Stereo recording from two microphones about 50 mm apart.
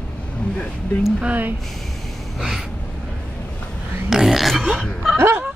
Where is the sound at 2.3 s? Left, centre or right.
Centre.